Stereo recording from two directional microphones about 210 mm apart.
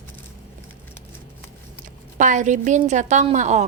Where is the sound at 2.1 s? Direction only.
35° right (ahead or behind).